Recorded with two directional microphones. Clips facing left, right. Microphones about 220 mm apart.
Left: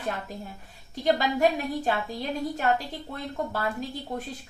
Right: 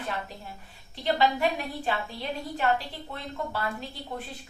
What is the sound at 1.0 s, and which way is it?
A woman's voice, 45° left (ahead or behind).